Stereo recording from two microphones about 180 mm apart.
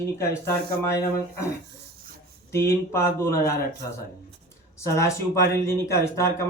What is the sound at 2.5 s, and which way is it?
Speech, 15° left (ahead or behind).